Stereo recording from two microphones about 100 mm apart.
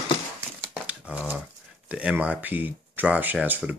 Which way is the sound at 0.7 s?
15° right (ahead or behind).